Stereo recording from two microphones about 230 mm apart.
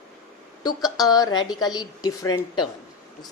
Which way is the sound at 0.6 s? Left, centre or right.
Centre.